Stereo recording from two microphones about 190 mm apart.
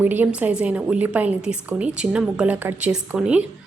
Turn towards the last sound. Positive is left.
turn(degrees=-5)  # may be behind; listen again after turning